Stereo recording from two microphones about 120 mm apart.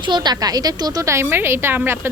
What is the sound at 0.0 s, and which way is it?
Speech, 40° right (ahead or behind).